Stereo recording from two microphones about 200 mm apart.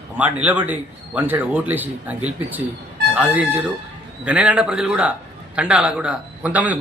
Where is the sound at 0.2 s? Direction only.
5° right (ahead or behind).